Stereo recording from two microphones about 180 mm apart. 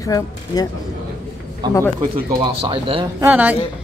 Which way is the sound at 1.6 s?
25° right (ahead or behind).